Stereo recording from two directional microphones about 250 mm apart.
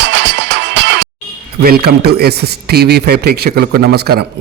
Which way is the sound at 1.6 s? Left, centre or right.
Right.